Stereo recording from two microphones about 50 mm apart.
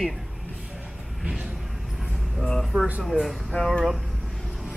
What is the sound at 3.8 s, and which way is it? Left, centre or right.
Speech, centre.